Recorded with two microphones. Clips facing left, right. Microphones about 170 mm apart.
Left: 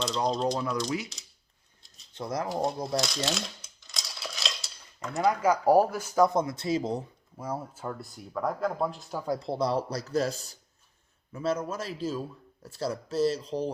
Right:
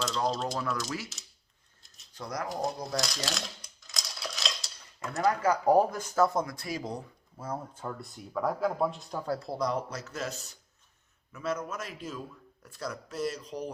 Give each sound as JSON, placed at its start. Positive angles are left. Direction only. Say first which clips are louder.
{"t": 0.4, "sound": "speech", "louder": "left 4 dB", "side_deg": 20}
{"t": 2.1, "sound": "speech", "louder": "left 4 dB", "side_deg": 25}
{"t": 2.5, "sound": "speech", "louder": "left 3 dB", "side_deg": 0}
{"t": 2.8, "sound": "coin", "louder": "left 4 dB", "side_deg": 0}
{"t": 5.3, "sound": "speech", "louder": "left 2 dB", "side_deg": 10}
{"t": 7.3, "sound": "speech", "louder": "left 2 dB", "side_deg": 10}
{"t": 9.2, "sound": "speech", "louder": "left 2 dB", "side_deg": 15}
{"t": 9.5, "sound": "speech", "louder": "left 6 dB", "side_deg": 30}